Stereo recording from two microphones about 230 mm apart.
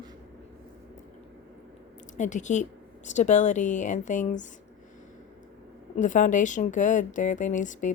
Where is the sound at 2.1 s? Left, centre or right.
Left.